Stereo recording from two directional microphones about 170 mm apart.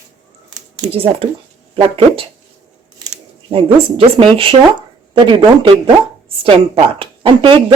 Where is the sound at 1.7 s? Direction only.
35° right (ahead or behind).